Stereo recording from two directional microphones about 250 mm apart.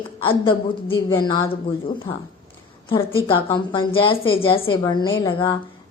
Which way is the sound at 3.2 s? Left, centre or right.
Centre.